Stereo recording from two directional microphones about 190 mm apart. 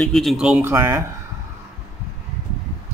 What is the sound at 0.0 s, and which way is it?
Speech, centre (ahead or behind).